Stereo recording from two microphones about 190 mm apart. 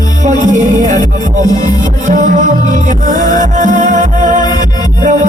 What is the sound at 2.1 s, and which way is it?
Music, 40° right (ahead or behind).